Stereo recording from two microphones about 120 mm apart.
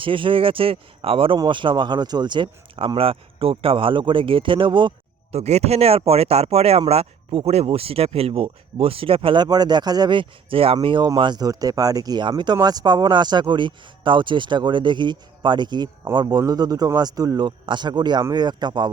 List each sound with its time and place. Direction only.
0.0 s speech: 45° right (ahead or behind)
5.3 s speech: 65° right (ahead or behind)
10.8 s speech: 40° right (ahead or behind)